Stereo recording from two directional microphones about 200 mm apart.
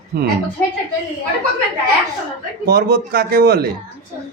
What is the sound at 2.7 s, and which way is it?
Speech, 50° right (ahead or behind).